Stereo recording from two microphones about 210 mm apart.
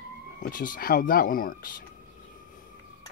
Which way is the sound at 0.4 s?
40° left (ahead or behind).